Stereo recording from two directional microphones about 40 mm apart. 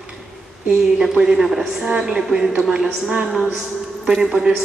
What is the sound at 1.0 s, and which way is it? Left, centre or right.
A woman's voice, centre.